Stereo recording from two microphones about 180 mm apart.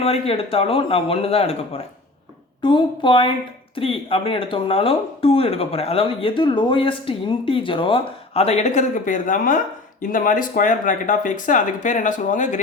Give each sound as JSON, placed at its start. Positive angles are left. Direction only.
{"t": 0.0, "sound": "speech", "side_deg": 30}